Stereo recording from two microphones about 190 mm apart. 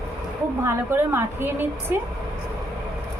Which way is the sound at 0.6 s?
15° right (ahead or behind).